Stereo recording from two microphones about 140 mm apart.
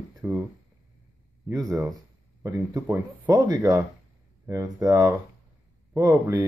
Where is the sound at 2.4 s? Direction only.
25° right (ahead or behind).